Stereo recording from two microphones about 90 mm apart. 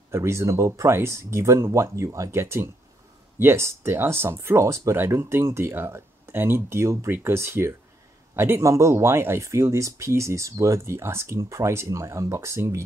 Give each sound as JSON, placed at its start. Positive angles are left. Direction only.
{"t": 0.1, "sound": "speech", "side_deg": -30}